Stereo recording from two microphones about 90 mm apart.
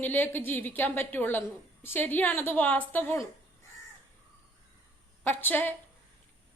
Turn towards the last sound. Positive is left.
turn(degrees=20)  # may be behind; listen again after turning